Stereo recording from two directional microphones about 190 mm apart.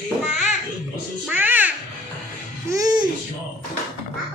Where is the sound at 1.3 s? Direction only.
10° right (ahead or behind).